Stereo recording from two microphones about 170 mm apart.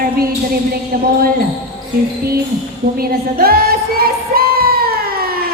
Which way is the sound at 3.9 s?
60° right (ahead or behind).